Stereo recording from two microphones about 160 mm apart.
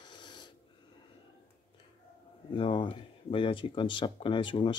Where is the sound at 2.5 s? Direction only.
30° left (ahead or behind).